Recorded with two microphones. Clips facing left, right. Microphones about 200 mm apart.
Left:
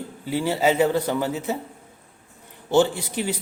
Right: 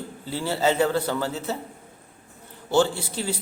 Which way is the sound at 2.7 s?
15° left (ahead or behind).